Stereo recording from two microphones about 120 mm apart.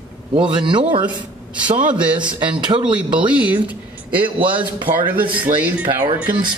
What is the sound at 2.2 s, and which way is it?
Speech, 40° right (ahead or behind).